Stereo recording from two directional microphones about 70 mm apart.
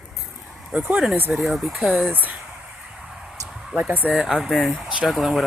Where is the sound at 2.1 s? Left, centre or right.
Right.